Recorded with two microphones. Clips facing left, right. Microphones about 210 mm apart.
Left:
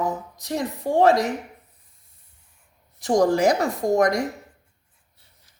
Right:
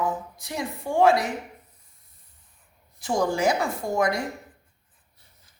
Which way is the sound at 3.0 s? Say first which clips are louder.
Left 5 dB; 40° left (ahead or behind).